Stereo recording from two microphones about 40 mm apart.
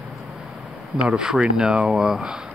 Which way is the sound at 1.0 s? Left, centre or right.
Right.